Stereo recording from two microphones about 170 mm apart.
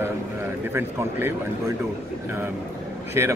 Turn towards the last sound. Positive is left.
turn(degrees=-15)  # may be behind; listen again after turning